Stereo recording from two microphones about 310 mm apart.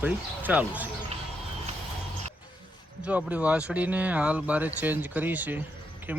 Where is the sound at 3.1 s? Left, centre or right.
Centre.